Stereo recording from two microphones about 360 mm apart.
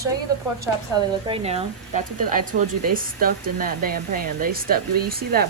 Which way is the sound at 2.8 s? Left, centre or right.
Right.